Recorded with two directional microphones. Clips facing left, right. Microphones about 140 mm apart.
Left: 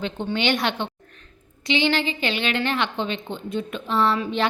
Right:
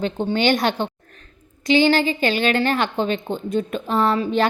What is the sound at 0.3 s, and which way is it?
A woman's voice, 40° right (ahead or behind).